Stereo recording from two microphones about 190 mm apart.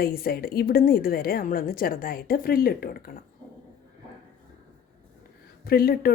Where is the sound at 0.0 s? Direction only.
50° left (ahead or behind).